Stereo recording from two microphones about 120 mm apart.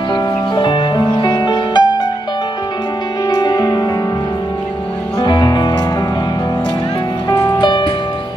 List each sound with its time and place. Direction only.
0.1 s music: 40° left (ahead or behind)
3.3 s music: 35° left (ahead or behind)
5.2 s music: 40° left (ahead or behind)
7.6 s music: 40° left (ahead or behind)